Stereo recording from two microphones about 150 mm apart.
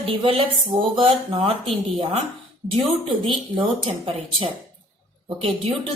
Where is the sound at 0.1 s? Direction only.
35° right (ahead or behind).